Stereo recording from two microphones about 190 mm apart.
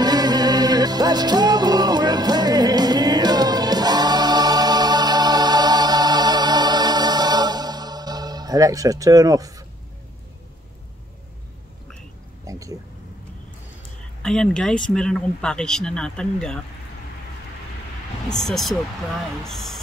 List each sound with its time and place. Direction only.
0.0 s music: 20° right (ahead or behind)
12.4 s a sound: 15° right (ahead or behind)
14.2 s speech: 5° left (ahead or behind)
18.4 s speech: centre (ahead or behind)